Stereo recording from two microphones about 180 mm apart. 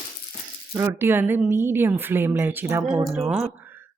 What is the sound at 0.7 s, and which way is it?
A woman's voice, 15° right (ahead or behind).